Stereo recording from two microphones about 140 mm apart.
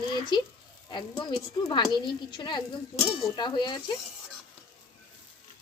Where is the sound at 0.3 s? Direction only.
35° left (ahead or behind).